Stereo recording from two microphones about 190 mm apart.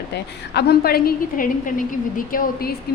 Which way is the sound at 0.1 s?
60° left (ahead or behind).